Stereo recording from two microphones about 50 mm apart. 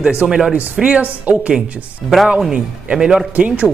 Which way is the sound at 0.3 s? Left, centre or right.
Centre.